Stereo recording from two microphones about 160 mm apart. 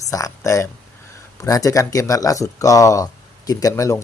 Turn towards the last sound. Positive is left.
turn(degrees=20)  # may be behind; listen again after turning